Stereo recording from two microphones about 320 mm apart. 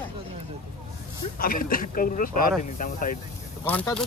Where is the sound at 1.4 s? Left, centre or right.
Left.